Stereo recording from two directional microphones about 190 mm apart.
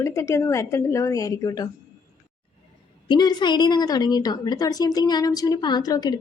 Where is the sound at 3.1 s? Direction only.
20° left (ahead or behind).